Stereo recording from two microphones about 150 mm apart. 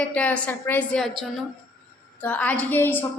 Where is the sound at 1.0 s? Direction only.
Centre (ahead or behind).